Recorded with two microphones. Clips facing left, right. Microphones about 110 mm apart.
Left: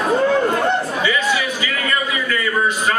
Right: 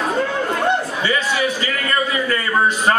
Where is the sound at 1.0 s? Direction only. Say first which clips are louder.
Even; 35° right (ahead or behind).